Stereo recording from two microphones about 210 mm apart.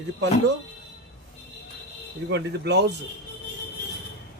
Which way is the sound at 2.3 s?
55° right (ahead or behind).